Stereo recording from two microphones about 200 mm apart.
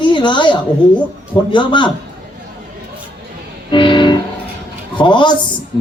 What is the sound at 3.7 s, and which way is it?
Music, 25° left (ahead or behind).